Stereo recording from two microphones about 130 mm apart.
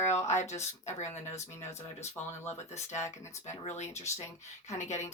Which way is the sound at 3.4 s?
60° left (ahead or behind).